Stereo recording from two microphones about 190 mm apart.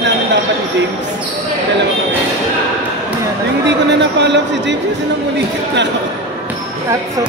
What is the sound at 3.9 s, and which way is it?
Speech, 65° right (ahead or behind).